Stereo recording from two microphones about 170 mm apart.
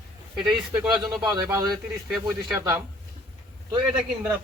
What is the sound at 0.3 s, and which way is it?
Speech, 5° right (ahead or behind).